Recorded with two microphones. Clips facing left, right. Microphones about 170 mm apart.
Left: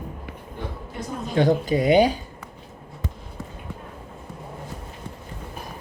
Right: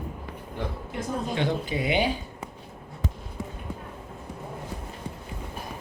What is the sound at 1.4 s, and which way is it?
Speech, 40° left (ahead or behind).